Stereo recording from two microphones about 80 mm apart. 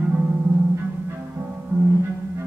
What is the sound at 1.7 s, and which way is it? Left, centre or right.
Music, right.